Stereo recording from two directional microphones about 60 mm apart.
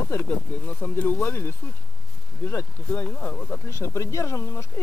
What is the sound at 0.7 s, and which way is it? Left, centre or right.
Speech, left.